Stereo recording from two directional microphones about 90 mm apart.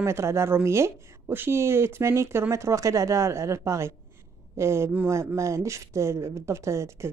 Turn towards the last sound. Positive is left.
turn(degrees=-30)  # may be behind; listen again after turning